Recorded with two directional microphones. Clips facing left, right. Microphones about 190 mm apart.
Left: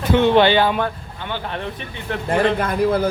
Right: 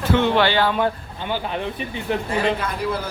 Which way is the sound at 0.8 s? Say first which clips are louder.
Right 2 dB; 15° right (ahead or behind).